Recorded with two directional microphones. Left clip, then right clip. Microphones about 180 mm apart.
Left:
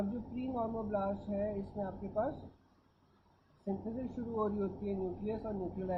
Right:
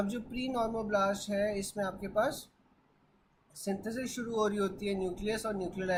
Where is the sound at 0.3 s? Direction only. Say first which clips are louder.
Right 5 dB; 25° right (ahead or behind).